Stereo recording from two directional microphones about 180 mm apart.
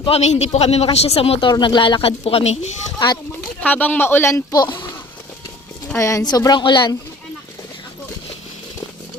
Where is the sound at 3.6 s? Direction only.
10° left (ahead or behind).